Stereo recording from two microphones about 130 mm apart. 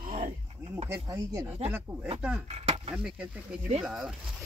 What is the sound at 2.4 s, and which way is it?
Speech, 50° right (ahead or behind).